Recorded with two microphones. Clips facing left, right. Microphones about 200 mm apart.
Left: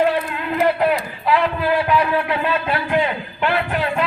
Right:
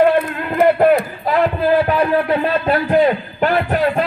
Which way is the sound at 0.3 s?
55° right (ahead or behind).